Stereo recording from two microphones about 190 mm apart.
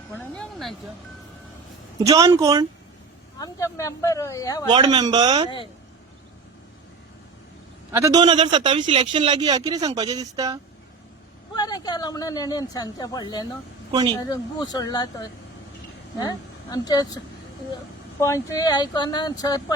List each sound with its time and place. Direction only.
0.1 s music: 10° left (ahead or behind)
2.0 s a man's voice: 20° right (ahead or behind)
3.3 s speech: 15° left (ahead or behind)
4.7 s a man's voice: 20° right (ahead or behind)
7.9 s a man's voice: 15° right (ahead or behind)
11.5 s speech: 20° left (ahead or behind)
13.9 s a man's voice: 20° right (ahead or behind)
14.3 s speech: 20° left (ahead or behind)
18.2 s speech: 15° left (ahead or behind)